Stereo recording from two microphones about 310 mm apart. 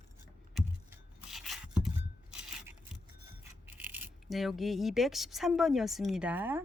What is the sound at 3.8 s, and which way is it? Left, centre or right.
A woman's voice, centre.